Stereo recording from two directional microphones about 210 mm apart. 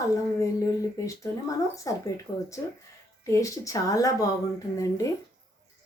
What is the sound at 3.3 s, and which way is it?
A woman's voice, 15° left (ahead or behind).